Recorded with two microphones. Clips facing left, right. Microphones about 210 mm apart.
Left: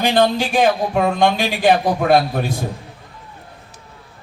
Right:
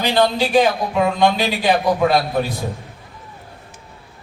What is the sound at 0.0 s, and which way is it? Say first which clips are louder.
A man's voice: left 1 dB; 50° left (ahead or behind).